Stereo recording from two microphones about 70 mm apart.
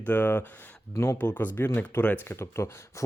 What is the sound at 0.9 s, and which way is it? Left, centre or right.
Speech, left.